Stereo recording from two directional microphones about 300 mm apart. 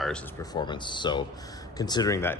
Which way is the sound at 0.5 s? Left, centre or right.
Centre.